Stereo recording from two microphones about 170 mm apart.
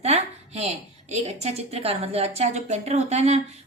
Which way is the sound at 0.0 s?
40° right (ahead or behind).